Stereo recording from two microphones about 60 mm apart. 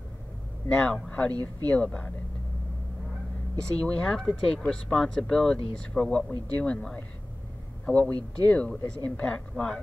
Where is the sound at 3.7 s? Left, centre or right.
Centre.